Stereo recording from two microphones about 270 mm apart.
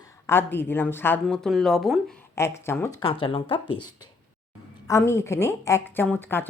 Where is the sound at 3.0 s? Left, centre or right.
Centre.